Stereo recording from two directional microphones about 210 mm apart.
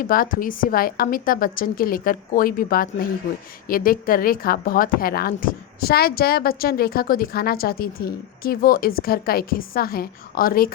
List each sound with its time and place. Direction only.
0.0 s a woman's voice: 40° left (ahead or behind)